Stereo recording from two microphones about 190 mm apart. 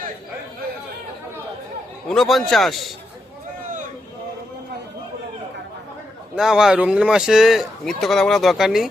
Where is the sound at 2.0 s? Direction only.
Centre (ahead or behind).